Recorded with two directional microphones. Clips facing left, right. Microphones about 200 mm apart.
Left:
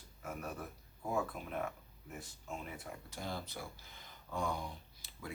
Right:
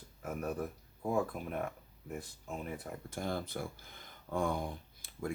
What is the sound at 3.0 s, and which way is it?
Speech, 50° right (ahead or behind).